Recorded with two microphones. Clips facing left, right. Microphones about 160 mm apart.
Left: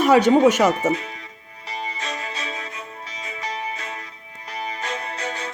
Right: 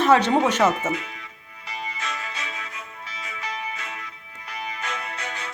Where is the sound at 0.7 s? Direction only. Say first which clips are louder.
Left 4 dB; 35° left (ahead or behind).